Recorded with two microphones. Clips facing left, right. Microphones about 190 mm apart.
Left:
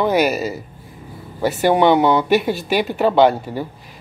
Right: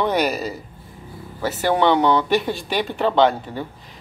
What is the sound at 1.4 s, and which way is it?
Speech, 15° left (ahead or behind).